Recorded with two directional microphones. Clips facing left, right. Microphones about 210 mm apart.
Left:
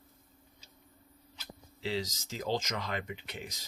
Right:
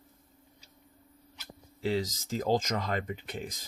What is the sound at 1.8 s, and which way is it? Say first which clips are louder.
Speech: right 5 dB; 50° right (ahead or behind).